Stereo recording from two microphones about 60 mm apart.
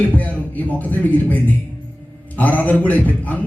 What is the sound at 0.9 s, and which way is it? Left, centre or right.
Speech, left.